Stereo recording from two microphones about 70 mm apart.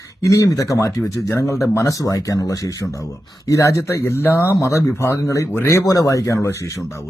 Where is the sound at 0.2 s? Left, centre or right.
Left.